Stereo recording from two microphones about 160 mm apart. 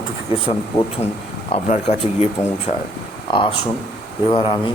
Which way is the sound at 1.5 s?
40° left (ahead or behind).